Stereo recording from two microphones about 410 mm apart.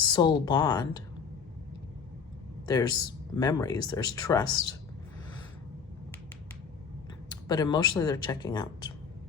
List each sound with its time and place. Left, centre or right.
0.0 s speech: centre
2.6 s a man's voice: centre
7.4 s speech: centre